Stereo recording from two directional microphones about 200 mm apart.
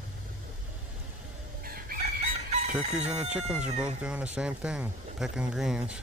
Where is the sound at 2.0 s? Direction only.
35° right (ahead or behind).